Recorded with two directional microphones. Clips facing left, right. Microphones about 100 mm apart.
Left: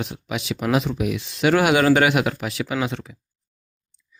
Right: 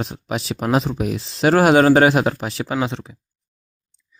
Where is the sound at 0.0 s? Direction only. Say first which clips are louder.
Right 3 dB; 35° right (ahead or behind).